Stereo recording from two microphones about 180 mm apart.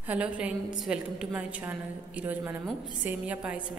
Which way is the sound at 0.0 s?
5° right (ahead or behind).